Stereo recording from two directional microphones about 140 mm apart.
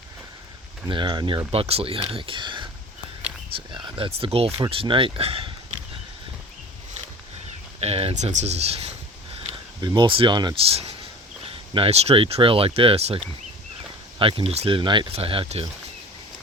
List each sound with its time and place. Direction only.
0.9 s speech: 35° right (ahead or behind)
3.7 s speech: 35° right (ahead or behind)
7.8 s speech: 45° right (ahead or behind)
9.8 s speech: 30° right (ahead or behind)
10.7 s speech: 45° right (ahead or behind)